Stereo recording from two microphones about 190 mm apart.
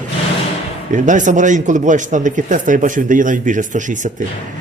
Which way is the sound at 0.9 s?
40° right (ahead or behind).